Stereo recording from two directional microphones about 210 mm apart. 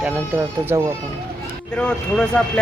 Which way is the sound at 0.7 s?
15° right (ahead or behind).